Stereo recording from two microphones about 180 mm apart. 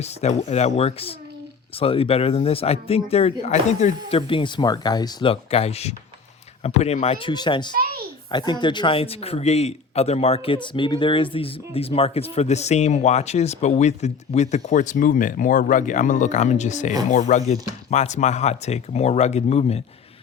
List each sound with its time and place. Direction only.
0.0 s a man's voice: 35° left (ahead or behind)